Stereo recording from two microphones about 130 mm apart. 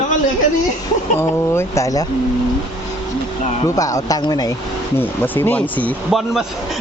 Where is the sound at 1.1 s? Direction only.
20° left (ahead or behind).